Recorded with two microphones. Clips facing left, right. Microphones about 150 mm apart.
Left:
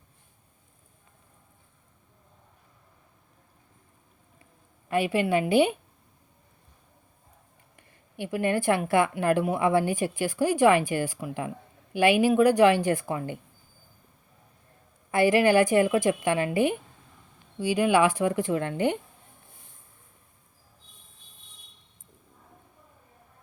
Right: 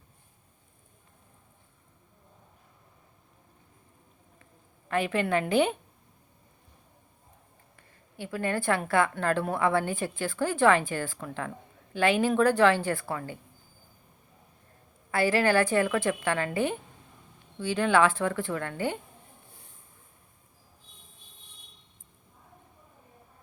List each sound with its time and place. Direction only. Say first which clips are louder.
4.9 s a woman's voice: left 3 dB; 10° left (ahead or behind)
7.8 s a woman's voice: left 5 dB; 15° left (ahead or behind)
15.1 s a woman's voice: left 4 dB; 15° left (ahead or behind)